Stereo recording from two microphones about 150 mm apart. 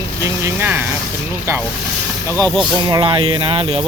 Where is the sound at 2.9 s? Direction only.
30° right (ahead or behind).